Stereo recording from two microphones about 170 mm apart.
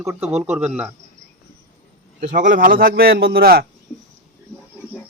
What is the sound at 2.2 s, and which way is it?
Speech, 45° right (ahead or behind).